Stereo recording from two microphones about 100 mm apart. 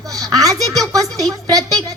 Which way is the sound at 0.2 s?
35° right (ahead or behind).